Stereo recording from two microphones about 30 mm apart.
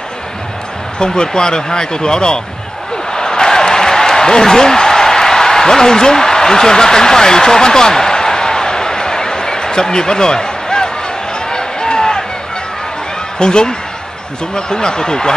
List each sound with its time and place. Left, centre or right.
0.9 s speech: left
3.1 s a sound: left
13.4 s speech: left